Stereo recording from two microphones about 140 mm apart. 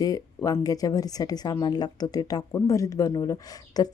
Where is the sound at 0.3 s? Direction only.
25° left (ahead or behind).